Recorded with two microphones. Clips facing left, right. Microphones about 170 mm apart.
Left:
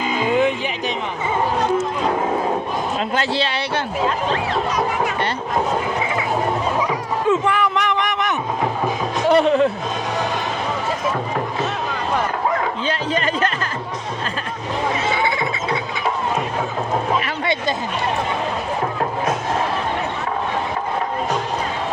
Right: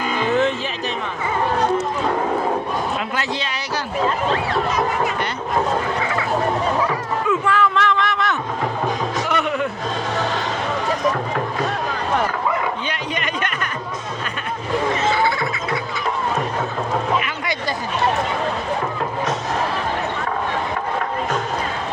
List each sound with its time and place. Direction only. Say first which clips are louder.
0.0 s music: left 1 dB; 15° left (ahead or behind)
3.2 s speech: left 4 dB; 30° left (ahead or behind)
7.3 s a sound: left 1 dB; 20° left (ahead or behind)
9.2 s a sound: left 11 dB; 30° left (ahead or behind)
13.1 s music: left 5 dB; 30° left (ahead or behind)
15.1 s music: right 1 dB; 20° left (ahead or behind)